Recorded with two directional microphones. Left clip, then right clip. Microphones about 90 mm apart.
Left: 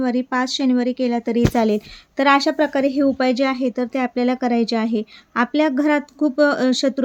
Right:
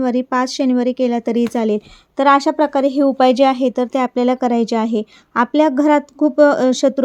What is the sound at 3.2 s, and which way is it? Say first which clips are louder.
Speech: right 7 dB; 80° right.